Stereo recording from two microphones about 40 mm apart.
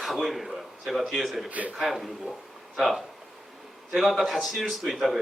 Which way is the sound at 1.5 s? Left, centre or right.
Right.